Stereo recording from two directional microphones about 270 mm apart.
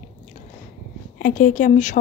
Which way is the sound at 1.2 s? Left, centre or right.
Left.